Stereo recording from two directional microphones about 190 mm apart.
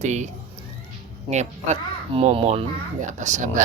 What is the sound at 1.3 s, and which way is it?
Speech, 35° right (ahead or behind).